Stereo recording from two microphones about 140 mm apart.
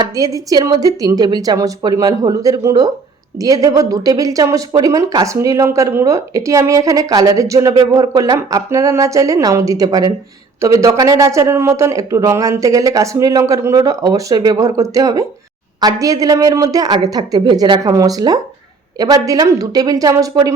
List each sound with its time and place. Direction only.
0.0 s speech: 25° right (ahead or behind)